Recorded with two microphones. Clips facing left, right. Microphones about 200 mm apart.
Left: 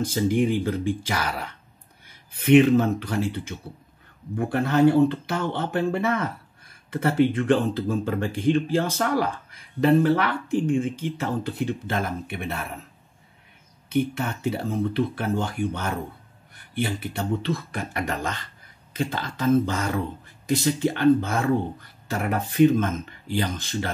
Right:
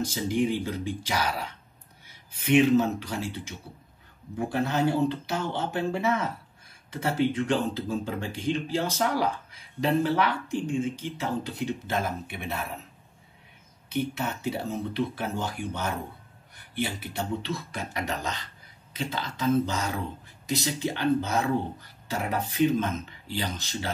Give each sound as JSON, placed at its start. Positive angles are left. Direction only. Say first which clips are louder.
{"t": 0.0, "sound": "speech", "louder": "left 4 dB", "side_deg": 55}
{"t": 13.9, "sound": "speech", "louder": "left 5 dB", "side_deg": 55}